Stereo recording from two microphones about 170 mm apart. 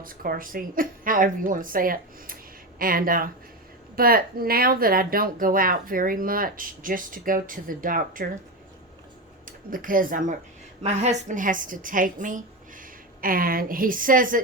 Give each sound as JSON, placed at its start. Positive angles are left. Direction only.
{"t": 0.0, "sound": "speech", "side_deg": -55}
{"t": 9.5, "sound": "a woman's voice", "side_deg": -55}